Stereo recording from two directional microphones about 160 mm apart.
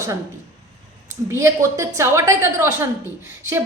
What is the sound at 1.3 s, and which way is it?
A woman's voice, 15° right (ahead or behind).